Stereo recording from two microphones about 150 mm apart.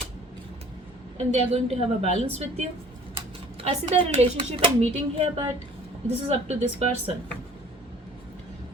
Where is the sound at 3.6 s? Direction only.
40° right (ahead or behind).